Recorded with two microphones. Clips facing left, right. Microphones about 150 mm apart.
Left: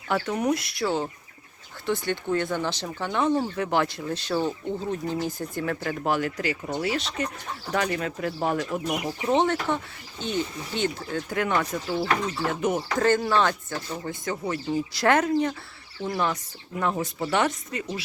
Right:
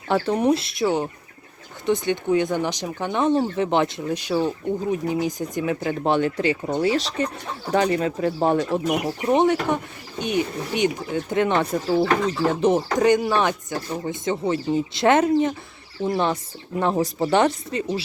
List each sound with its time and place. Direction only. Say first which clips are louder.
0.1 s speech: right 5 dB; 30° right (ahead or behind)
8.9 s speech: right 2 dB; 15° right (ahead or behind); by 13.0 s 30° right (ahead or behind)
13.0 s speech: even; 15° right (ahead or behind)